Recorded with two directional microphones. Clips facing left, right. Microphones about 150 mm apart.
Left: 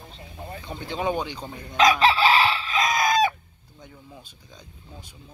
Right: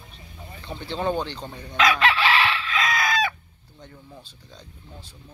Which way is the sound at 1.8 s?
40° left (ahead or behind).